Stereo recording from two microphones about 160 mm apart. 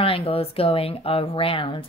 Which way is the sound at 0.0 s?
35° left (ahead or behind).